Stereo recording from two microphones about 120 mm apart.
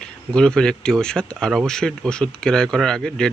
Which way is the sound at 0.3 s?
5° left (ahead or behind).